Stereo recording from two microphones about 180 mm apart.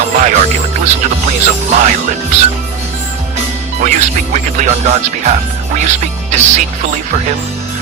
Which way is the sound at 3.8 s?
45° right (ahead or behind).